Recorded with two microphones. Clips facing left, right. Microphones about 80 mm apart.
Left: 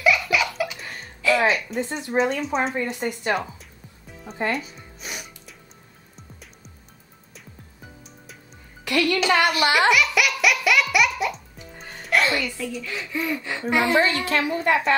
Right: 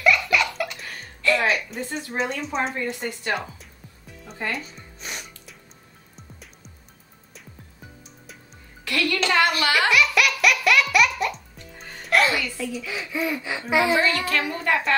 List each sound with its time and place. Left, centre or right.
0.0 s laughter: centre
1.2 s music: centre
1.8 s speech: left
2.1 s speech: centre
2.7 s speech: left
4.6 s music: centre
8.8 s a woman's voice: centre
9.8 s music: centre
12.1 s speech: centre
14.0 s speech: left